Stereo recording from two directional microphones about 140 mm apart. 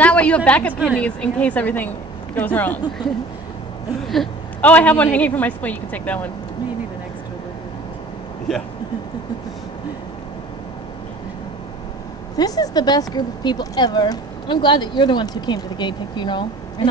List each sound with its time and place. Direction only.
0.0 s a sound: 10° left (ahead or behind)
0.5 s a woman's voice: 10° left (ahead or behind)
4.1 s a woman's voice: 5° left (ahead or behind)
12.4 s speech: 25° left (ahead or behind)